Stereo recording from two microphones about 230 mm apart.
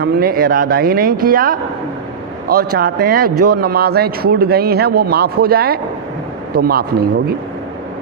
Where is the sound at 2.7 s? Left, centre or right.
Right.